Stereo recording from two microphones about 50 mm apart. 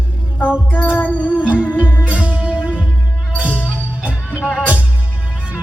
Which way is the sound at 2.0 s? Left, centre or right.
Right.